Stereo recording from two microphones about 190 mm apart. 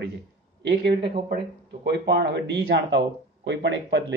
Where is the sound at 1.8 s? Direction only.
65° right (ahead or behind).